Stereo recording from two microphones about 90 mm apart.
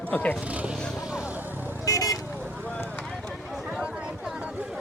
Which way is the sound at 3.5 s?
5° right (ahead or behind).